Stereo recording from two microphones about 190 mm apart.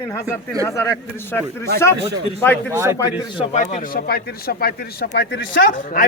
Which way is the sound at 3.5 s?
40° left (ahead or behind).